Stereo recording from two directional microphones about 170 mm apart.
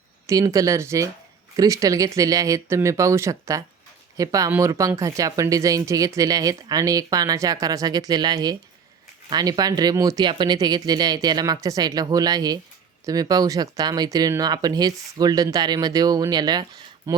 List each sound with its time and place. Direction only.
0.3 s speech: 20° right (ahead or behind)